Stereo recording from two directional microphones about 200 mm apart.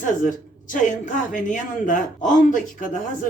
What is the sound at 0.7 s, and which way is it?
Speech, 40° left (ahead or behind).